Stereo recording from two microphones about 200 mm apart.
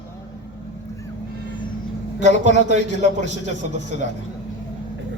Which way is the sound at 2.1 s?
35° right (ahead or behind).